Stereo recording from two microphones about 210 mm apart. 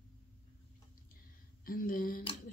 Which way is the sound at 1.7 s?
40° left (ahead or behind).